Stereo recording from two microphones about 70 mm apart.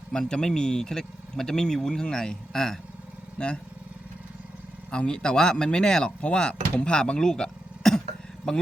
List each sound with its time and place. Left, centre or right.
0.1 s speech: centre
4.9 s speech: centre